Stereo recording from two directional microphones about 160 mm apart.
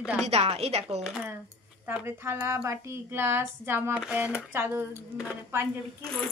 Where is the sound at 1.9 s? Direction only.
15° right (ahead or behind).